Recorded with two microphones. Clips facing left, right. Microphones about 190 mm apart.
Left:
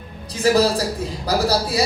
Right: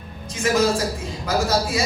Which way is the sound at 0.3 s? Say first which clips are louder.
Left 3 dB; 35° left (ahead or behind).